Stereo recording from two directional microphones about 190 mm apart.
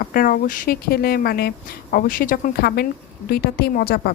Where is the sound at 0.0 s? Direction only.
50° left (ahead or behind).